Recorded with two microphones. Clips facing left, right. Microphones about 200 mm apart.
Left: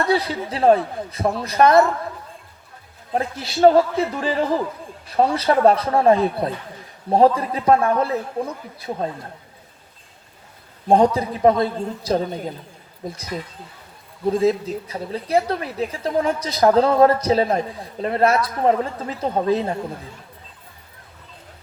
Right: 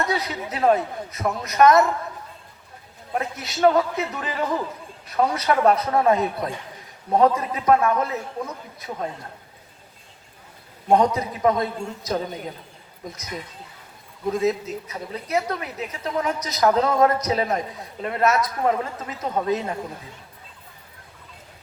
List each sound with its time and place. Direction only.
0.0 s a woman's voice: 30° left (ahead or behind)
3.2 s a woman's voice: 30° left (ahead or behind)
10.8 s a woman's voice: 30° left (ahead or behind)